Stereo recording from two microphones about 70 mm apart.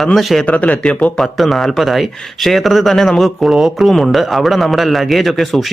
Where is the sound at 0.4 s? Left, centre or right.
Left.